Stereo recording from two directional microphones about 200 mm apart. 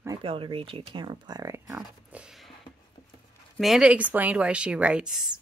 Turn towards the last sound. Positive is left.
turn(degrees=-5)  # may be behind; listen again after turning